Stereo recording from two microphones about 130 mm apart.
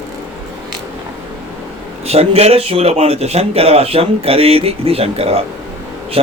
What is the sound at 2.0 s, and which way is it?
Mantra, 50° right (ahead or behind).